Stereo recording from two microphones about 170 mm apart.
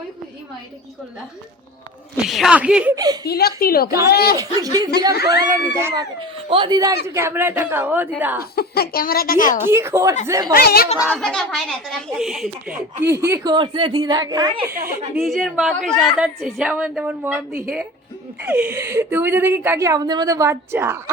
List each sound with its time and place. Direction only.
2.2 s speech: centre (ahead or behind)
2.9 s speech: 25° right (ahead or behind)
3.2 s a woman's voice: 65° left (ahead or behind)
3.8 s speech: 20° right (ahead or behind)
4.1 s speech: 65° left (ahead or behind)
4.4 s speech: 20° right (ahead or behind)
5.1 s speech: 80° left
5.7 s speech: 20° right (ahead or behind)
8.5 s a woman's voice: 65° left (ahead or behind)
9.6 s speech: 15° right (ahead or behind)
10.5 s a woman's voice: 65° left (ahead or behind)
11.1 s speech: 5° left (ahead or behind); by 14.8 s 25° right (ahead or behind)
15.1 s speech: centre (ahead or behind)